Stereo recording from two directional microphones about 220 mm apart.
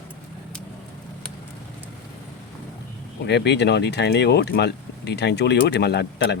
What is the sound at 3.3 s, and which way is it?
Speech, 50° left (ahead or behind).